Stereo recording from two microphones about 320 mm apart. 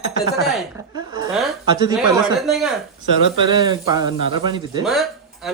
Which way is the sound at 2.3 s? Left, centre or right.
Centre.